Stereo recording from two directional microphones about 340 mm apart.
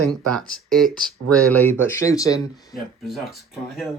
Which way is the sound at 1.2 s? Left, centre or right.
Right.